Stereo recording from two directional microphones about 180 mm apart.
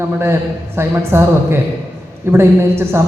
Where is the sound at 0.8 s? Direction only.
15° right (ahead or behind).